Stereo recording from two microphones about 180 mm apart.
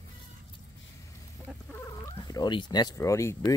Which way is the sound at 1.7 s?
15° left (ahead or behind).